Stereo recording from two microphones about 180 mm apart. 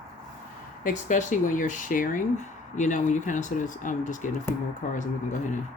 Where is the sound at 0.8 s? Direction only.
45° left (ahead or behind).